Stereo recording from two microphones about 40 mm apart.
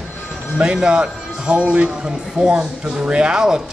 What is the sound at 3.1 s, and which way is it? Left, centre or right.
Speech, right.